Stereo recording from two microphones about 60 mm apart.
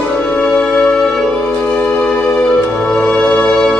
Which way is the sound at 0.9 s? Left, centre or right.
Centre.